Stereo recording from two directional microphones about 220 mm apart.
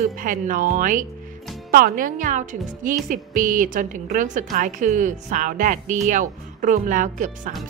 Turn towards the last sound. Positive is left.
turn(degrees=-35)  # may be behind; listen again after turning